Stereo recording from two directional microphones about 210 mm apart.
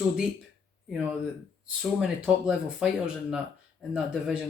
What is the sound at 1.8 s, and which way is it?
Speech, 5° right (ahead or behind).